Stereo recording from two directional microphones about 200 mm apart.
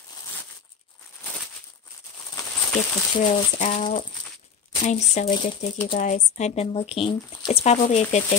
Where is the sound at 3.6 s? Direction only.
35° left (ahead or behind).